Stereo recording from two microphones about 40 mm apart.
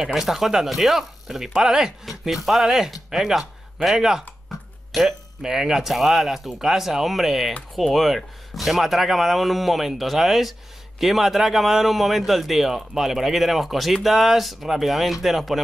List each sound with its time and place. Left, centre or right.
0.0 s a man's voice: centre